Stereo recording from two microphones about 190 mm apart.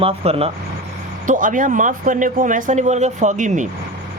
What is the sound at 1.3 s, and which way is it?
Speech, 45° right (ahead or behind).